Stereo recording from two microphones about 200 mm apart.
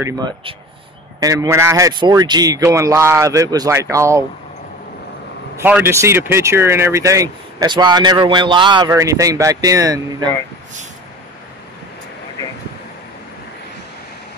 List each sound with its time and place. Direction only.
0.0 s speech: 20° right (ahead or behind)
5.6 s speech: 10° right (ahead or behind)